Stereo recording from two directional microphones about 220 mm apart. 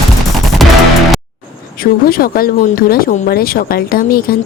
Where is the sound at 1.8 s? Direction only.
40° left (ahead or behind).